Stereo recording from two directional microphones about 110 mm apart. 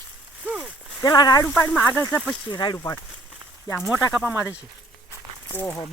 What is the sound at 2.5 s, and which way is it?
Speech, 40° left (ahead or behind).